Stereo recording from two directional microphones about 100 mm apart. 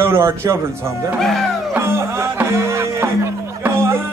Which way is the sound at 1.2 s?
Centre (ahead or behind).